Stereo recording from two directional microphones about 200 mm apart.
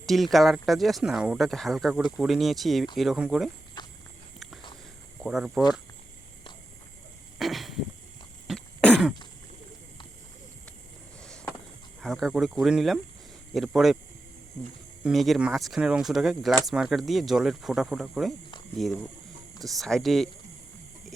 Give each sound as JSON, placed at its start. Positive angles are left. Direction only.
{"t": 0.0, "sound": "speech", "side_deg": 0}
{"t": 3.8, "sound": "walk", "side_deg": 20}
{"t": 5.2, "sound": "speech", "side_deg": 0}
{"t": 7.3, "sound": "a sound", "side_deg": 0}
{"t": 8.4, "sound": "throat clearing", "side_deg": 5}
{"t": 11.2, "sound": "a sound", "side_deg": 5}
{"t": 11.9, "sound": "speech", "side_deg": 0}
{"t": 15.0, "sound": "speech", "side_deg": 0}